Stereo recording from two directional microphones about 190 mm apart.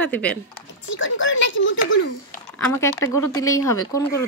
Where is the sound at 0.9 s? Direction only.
80° left.